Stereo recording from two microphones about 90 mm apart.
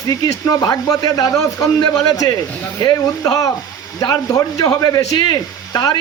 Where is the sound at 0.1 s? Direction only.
40° left (ahead or behind).